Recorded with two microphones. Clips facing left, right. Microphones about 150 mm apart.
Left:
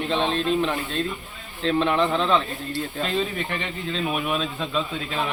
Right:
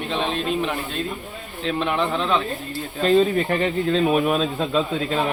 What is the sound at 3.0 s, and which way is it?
Speech, 40° right (ahead or behind).